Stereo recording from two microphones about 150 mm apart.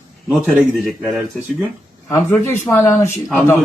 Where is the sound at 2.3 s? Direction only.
15° left (ahead or behind).